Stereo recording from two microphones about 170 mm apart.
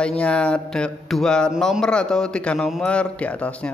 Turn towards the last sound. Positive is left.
turn(degrees=10)  # may be behind; listen again after turning